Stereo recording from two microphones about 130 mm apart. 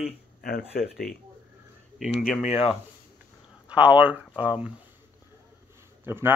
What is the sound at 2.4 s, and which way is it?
Speech, 55° left (ahead or behind).